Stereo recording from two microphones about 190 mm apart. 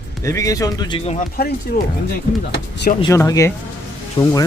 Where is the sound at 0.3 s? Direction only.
15° left (ahead or behind).